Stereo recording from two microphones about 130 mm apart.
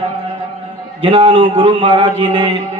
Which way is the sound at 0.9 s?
45° right (ahead or behind).